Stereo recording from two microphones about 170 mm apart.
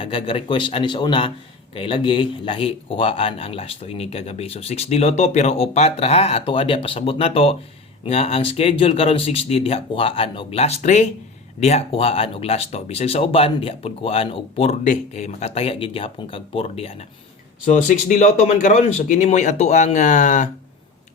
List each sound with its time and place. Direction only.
0.0 s a man's voice: 30° left (ahead or behind)
17.7 s speech: 45° left (ahead or behind)